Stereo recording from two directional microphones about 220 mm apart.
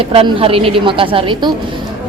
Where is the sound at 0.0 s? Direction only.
25° right (ahead or behind).